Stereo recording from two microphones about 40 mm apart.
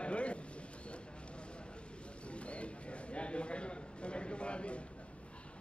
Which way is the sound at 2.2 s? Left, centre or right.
Left.